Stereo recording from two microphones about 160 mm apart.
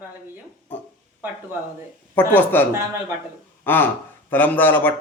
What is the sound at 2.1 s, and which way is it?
Speech, 10° left (ahead or behind).